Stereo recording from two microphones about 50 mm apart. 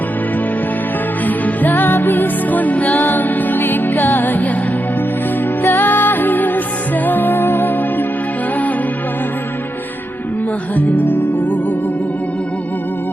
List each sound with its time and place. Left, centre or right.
1.6 s music: left
5.6 s music: left
10.8 s music: left